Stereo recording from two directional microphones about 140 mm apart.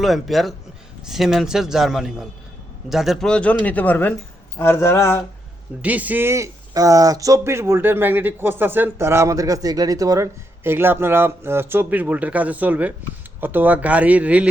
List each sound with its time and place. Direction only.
0.0 s a man's voice: centre (ahead or behind); by 5.2 s 20° left (ahead or behind)
5.8 s speech: 10° right (ahead or behind)